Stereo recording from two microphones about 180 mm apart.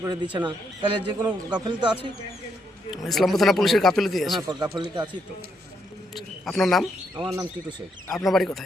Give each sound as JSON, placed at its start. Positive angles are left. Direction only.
{"t": 0.0, "sound": "a man's voice", "side_deg": -25}
{"t": 2.9, "sound": "speech", "side_deg": 0}
{"t": 4.4, "sound": "a man's voice", "side_deg": -25}
{"t": 6.1, "sound": "bird", "side_deg": 0}
{"t": 7.2, "sound": "a man's voice", "side_deg": -20}
{"t": 8.0, "sound": "speech", "side_deg": 0}